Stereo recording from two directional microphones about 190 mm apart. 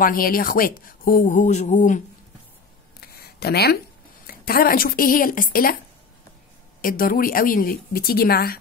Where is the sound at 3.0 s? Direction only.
55° left (ahead or behind).